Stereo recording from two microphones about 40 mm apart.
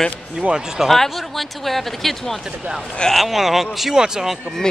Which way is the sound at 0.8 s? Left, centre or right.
Centre.